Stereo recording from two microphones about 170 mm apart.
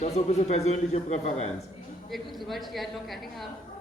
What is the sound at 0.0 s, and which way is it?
Speech, 40° left (ahead or behind).